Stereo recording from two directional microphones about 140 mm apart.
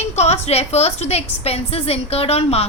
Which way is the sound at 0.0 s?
50° left (ahead or behind).